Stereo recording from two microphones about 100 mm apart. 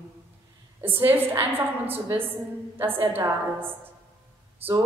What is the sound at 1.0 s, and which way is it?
A woman's voice, 20° right (ahead or behind).